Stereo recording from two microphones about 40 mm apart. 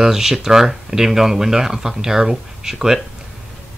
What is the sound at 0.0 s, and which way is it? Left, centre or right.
Speech, centre.